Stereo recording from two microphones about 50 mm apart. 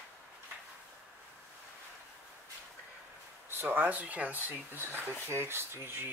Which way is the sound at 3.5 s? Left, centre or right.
Right.